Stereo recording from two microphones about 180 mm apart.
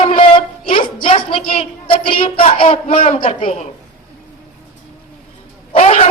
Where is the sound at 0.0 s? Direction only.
30° left (ahead or behind).